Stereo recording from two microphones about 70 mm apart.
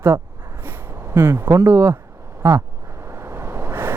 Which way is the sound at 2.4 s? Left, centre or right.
Right.